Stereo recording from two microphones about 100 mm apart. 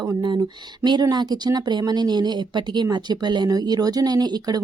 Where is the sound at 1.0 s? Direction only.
45° right (ahead or behind).